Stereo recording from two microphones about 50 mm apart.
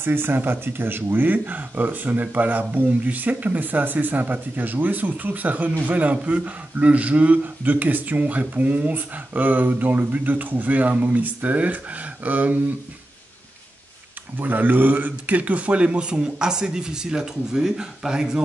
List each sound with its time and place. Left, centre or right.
0.0 s speech: right
14.4 s a man's voice: right; by 18.4 s centre